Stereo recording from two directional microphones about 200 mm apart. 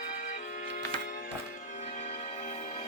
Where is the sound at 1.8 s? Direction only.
35° left (ahead or behind).